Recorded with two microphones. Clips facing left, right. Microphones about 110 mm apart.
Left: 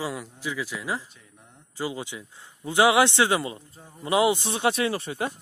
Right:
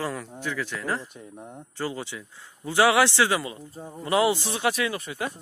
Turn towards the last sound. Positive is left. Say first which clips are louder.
# left 2 dB
turn(degrees=30)  # may be behind; listen again after turning